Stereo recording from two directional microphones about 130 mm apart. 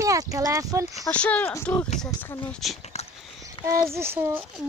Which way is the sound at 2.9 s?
55° left (ahead or behind).